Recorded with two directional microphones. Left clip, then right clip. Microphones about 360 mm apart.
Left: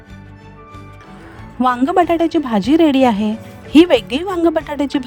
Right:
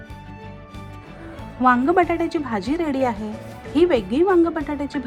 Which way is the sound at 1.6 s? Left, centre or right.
Left.